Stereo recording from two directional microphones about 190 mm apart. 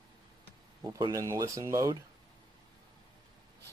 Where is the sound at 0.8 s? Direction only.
20° right (ahead or behind).